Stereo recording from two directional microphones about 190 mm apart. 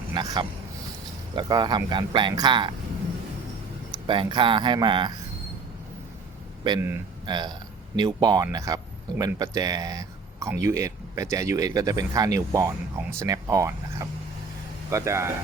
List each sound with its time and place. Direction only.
0.1 s speech: 20° right (ahead or behind)
3.9 s speech: 25° right (ahead or behind)
6.7 s speech: 15° right (ahead or behind)